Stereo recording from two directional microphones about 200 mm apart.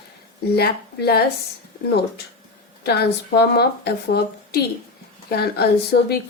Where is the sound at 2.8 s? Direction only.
55° left (ahead or behind).